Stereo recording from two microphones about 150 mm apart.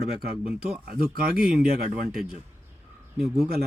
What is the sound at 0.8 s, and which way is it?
Speech, 75° right (ahead or behind).